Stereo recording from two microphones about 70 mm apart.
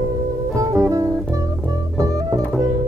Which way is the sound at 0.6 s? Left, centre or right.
Right.